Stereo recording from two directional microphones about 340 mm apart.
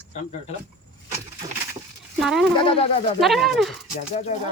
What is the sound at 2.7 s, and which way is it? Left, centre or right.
Speech, centre.